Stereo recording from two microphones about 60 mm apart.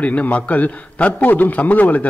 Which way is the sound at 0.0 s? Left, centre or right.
Left.